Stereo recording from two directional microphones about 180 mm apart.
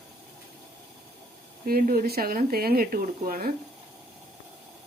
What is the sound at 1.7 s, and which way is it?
Speech, 55° right (ahead or behind).